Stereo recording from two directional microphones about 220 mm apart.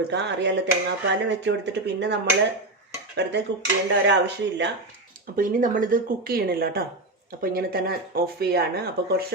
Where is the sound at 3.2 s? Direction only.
50° right (ahead or behind).